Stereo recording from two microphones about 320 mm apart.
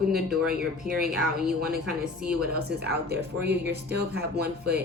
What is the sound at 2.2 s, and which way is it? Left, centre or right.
Speech, right.